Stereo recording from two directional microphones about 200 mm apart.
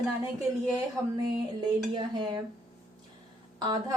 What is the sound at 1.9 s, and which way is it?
Speech, 20° right (ahead or behind).